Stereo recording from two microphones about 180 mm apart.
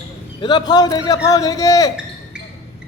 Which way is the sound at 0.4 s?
25° left (ahead or behind).